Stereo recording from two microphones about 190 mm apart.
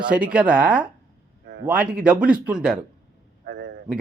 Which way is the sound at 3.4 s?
55° right (ahead or behind).